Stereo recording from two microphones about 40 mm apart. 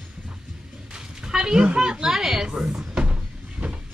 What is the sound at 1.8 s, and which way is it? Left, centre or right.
A woman's voice, centre.